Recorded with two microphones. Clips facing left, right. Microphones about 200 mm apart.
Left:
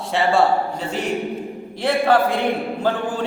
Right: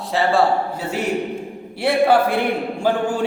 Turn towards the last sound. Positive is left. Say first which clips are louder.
# right 1 dB
turn(degrees=-10)  # may be behind; listen again after turning